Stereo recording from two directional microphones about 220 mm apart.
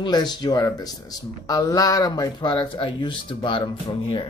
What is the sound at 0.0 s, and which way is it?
Speech, 20° left (ahead or behind).